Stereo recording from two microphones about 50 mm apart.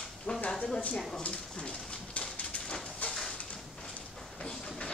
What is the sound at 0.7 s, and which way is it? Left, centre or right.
Speech, left.